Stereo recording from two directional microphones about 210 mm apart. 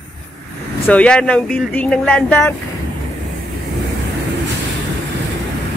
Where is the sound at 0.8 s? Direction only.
5° left (ahead or behind).